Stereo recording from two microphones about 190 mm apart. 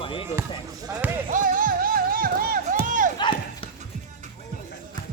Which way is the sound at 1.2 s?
45° right (ahead or behind).